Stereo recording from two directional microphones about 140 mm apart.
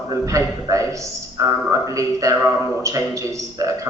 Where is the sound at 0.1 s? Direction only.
25° right (ahead or behind).